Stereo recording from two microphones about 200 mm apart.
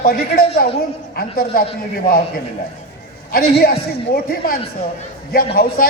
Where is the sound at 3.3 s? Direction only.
50° left (ahead or behind).